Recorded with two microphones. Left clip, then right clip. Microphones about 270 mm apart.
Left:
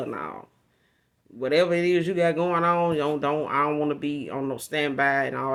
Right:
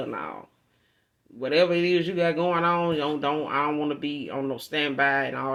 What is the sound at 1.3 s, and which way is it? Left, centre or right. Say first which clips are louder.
Speech: even; left.